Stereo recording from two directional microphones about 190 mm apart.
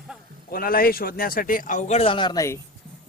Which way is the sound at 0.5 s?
50° left (ahead or behind).